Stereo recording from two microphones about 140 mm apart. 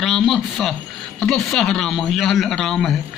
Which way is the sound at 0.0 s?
Centre (ahead or behind).